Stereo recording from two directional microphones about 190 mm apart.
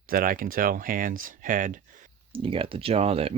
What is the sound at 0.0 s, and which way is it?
Speech, 50° right (ahead or behind).